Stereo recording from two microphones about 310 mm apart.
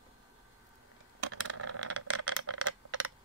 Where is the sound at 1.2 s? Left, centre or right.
Right.